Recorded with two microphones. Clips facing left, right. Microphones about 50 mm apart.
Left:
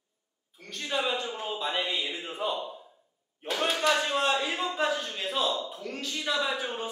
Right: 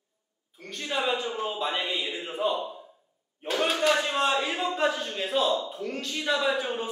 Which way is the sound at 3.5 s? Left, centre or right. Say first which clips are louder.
Right 2 dB; centre.